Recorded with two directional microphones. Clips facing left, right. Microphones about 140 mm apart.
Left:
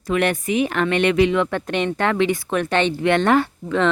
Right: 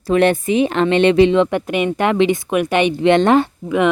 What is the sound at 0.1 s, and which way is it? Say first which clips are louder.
Speech: right 6 dB; 30° right (ahead or behind).